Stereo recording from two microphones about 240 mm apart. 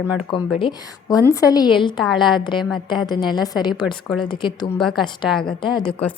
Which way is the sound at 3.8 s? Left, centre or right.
Centre.